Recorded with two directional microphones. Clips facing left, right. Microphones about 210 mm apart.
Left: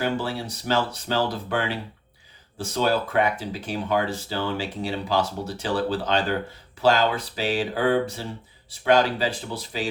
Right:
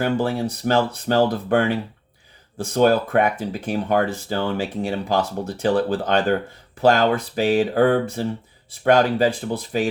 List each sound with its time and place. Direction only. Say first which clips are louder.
0.0 s speech: right 5 dB; 50° right (ahead or behind)